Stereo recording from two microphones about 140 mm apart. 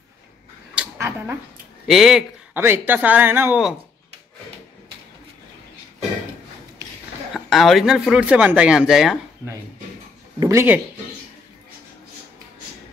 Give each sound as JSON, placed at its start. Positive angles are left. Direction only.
{"t": 0.9, "sound": "speech", "side_deg": -20}
{"t": 1.9, "sound": "speech", "side_deg": 0}
{"t": 2.5, "sound": "speech", "side_deg": -15}
{"t": 7.3, "sound": "speech", "side_deg": 0}
{"t": 10.4, "sound": "speech", "side_deg": -20}